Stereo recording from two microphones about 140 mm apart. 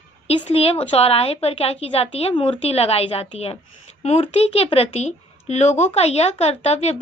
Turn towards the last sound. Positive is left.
turn(degrees=50)  # may be behind; listen again after turning